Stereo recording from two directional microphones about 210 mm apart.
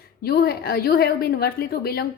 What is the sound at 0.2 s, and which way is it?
A woman's voice, 45° left (ahead or behind).